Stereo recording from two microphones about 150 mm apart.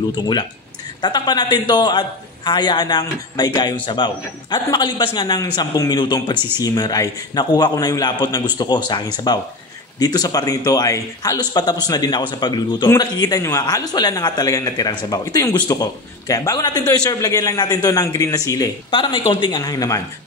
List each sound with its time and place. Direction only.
0.1 s a man's voice: 30° left (ahead or behind)